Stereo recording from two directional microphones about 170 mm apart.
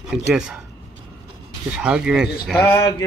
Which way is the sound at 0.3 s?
5° right (ahead or behind).